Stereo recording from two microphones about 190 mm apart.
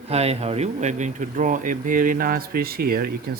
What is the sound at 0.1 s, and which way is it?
Speech, 35° right (ahead or behind).